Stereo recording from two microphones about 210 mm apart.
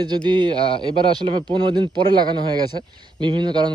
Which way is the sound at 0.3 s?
20° right (ahead or behind).